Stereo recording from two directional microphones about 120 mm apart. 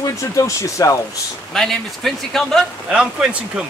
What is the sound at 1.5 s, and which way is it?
A man's voice, 5° left (ahead or behind).